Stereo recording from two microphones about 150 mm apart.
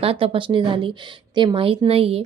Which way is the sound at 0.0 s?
40° right (ahead or behind).